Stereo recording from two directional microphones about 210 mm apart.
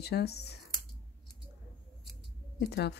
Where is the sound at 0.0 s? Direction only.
50° left (ahead or behind).